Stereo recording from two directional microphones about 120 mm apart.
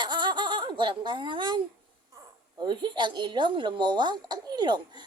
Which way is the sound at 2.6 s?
40° right (ahead or behind).